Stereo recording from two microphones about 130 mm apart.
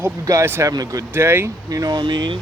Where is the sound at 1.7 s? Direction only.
30° right (ahead or behind).